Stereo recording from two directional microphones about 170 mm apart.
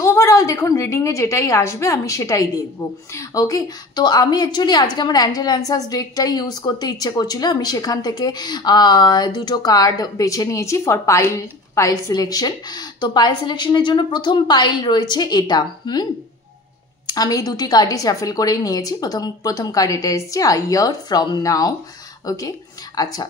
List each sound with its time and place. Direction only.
0.0 s a woman's voice: 15° left (ahead or behind)